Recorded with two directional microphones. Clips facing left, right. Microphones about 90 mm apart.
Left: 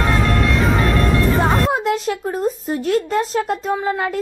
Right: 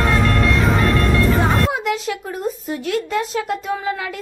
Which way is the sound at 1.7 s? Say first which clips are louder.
Left 3 dB; 40° left (ahead or behind).